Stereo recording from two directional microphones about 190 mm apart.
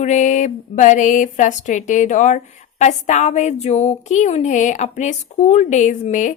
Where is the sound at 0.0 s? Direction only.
40° left (ahead or behind).